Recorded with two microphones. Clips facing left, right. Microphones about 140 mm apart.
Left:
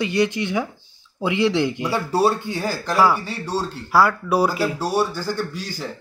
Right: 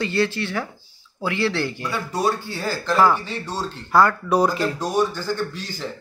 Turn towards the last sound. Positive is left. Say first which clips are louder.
# even
turn(degrees=10)  # may be behind; listen again after turning